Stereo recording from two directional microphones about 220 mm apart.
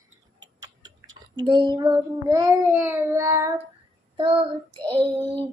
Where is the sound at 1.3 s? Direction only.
20° right (ahead or behind).